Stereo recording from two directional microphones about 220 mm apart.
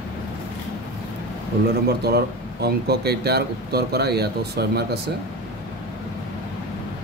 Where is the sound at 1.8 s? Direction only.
45° right (ahead or behind).